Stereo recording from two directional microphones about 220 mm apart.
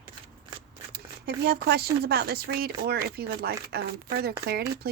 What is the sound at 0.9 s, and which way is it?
Speech, 45° right (ahead or behind).